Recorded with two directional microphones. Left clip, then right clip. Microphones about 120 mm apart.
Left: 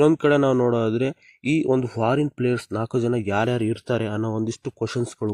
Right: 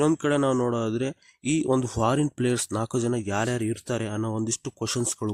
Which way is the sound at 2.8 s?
5° right (ahead or behind).